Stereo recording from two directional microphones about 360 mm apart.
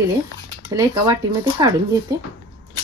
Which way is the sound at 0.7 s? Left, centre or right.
Centre.